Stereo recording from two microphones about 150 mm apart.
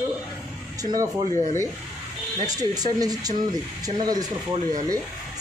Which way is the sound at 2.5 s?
25° right (ahead or behind).